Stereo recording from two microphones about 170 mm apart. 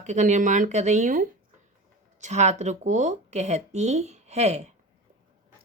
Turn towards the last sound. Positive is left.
turn(degrees=-40)  # may be behind; listen again after turning